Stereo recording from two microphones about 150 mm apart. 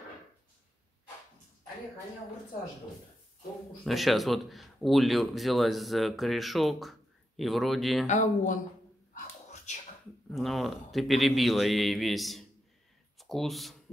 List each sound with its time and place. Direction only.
3.8 s speech: centre (ahead or behind)
8.1 s speech: 55° left (ahead or behind)
9.1 s a sound: 50° left (ahead or behind)
10.3 s speech: centre (ahead or behind)